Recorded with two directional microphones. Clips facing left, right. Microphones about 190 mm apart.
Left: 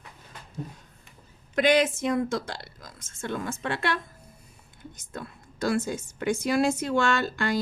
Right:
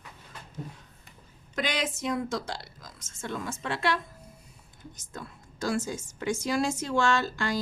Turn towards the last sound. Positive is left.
turn(degrees=60)  # may be behind; listen again after turning